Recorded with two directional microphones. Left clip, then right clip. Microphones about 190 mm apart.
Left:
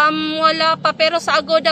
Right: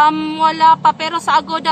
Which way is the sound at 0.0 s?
20° right (ahead or behind).